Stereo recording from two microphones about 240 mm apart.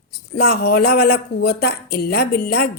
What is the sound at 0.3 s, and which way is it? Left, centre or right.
A woman's voice, left.